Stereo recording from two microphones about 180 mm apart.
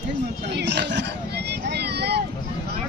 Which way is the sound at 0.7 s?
70° right (ahead or behind).